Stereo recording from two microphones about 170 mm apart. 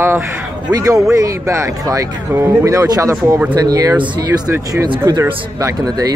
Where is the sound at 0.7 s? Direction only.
20° right (ahead or behind).